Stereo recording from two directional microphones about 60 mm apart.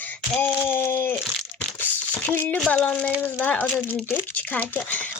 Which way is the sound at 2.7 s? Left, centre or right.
Left.